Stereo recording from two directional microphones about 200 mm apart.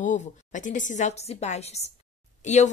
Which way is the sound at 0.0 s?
40° left (ahead or behind).